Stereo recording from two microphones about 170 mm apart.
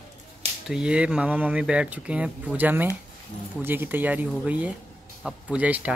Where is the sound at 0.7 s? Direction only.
5° right (ahead or behind).